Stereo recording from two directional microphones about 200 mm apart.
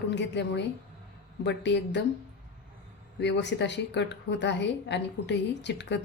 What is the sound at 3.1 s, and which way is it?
A woman's voice, 60° left (ahead or behind).